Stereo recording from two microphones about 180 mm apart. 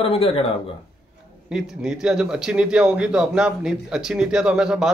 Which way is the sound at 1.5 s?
5° right (ahead or behind).